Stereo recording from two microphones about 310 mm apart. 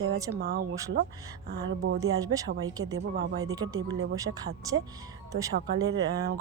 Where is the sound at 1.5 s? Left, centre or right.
Right.